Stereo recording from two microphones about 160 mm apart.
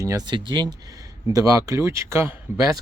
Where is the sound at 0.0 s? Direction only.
20° right (ahead or behind).